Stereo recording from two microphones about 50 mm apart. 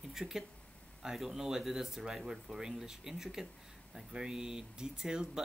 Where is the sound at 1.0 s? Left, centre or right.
Centre.